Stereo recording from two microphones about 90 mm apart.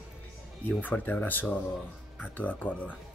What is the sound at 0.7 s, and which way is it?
Speech, 20° left (ahead or behind).